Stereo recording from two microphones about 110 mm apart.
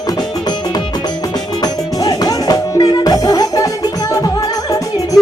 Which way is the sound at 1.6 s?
35° left (ahead or behind).